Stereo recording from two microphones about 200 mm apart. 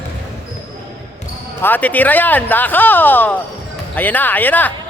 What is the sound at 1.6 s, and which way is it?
Speech, 10° left (ahead or behind).